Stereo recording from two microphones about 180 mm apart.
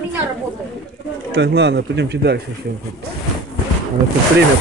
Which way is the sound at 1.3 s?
75° right (ahead or behind).